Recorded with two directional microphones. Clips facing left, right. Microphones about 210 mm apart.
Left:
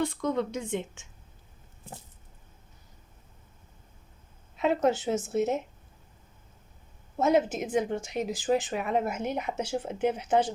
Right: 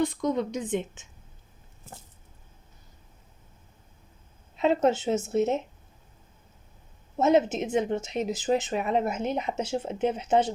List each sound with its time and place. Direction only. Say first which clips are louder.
0.0 s a woman's voice: right 2 dB; 15° right (ahead or behind)
4.5 s a woman's voice: right 2 dB; 25° right (ahead or behind)
7.2 s a woman's voice: right 2 dB; 25° right (ahead or behind)